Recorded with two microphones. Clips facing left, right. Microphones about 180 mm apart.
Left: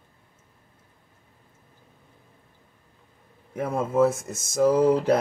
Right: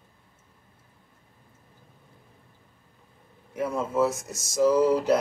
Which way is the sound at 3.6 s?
55° left (ahead or behind).